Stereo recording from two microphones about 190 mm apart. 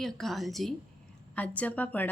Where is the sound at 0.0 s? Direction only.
Centre (ahead or behind).